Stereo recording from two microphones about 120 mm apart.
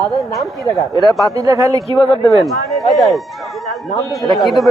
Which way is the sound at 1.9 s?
45° left (ahead or behind).